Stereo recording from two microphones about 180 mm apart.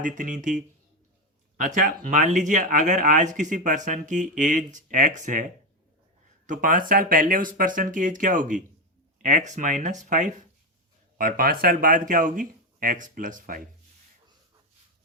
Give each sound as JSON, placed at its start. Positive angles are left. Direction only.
{"t": 0.0, "sound": "speech", "side_deg": -45}